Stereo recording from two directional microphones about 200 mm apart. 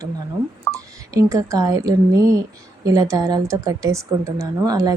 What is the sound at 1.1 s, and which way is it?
Speech, 15° right (ahead or behind).